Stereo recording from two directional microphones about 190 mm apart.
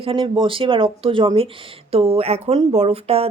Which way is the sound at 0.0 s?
30° right (ahead or behind).